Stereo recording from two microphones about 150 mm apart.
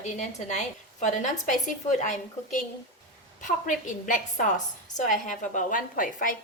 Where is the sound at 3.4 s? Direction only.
60° left (ahead or behind).